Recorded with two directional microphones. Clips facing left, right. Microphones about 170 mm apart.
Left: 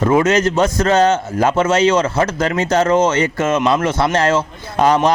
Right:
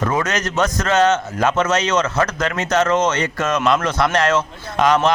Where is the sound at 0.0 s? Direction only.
25° left (ahead or behind).